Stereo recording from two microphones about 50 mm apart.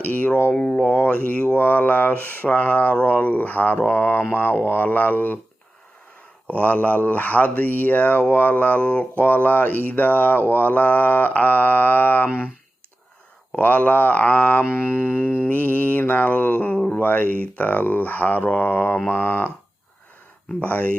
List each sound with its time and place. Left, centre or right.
0.0 s speech: left
6.5 s speech: left
13.6 s speech: left
20.6 s speech: left